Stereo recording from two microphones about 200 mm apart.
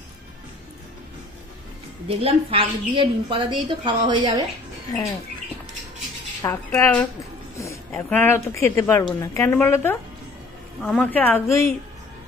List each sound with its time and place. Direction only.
2.0 s a woman's voice: 30° right (ahead or behind)
6.4 s a woman's voice: 10° left (ahead or behind)